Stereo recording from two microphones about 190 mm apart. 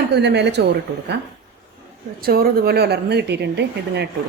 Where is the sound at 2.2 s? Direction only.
50° right (ahead or behind).